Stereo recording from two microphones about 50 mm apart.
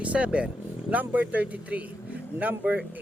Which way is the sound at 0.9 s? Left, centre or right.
Right.